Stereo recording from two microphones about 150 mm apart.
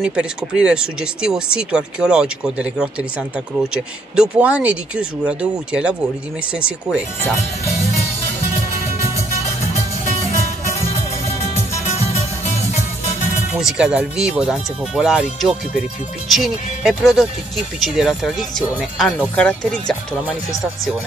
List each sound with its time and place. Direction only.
0.0 s speech: 5° right (ahead or behind)
11.8 s music: 50° left (ahead or behind)
13.5 s speech: 5° right (ahead or behind)
16.3 s speech: centre (ahead or behind)